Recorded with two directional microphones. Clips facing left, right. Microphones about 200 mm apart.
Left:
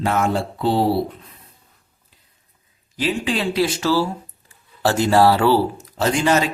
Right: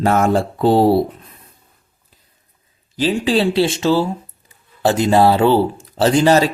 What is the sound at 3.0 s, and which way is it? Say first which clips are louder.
Speech: right 6 dB; 30° right (ahead or behind).